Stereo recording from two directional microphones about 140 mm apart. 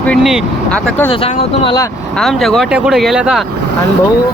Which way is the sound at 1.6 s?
30° left (ahead or behind).